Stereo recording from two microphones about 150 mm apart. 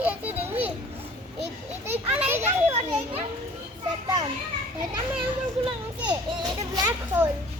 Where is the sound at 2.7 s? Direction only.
40° right (ahead or behind).